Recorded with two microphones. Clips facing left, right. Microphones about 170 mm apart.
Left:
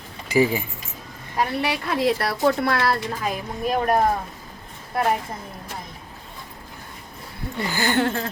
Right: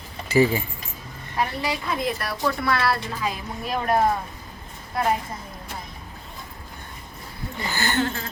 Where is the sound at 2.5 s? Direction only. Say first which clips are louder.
Left 2 dB; 45° left (ahead or behind).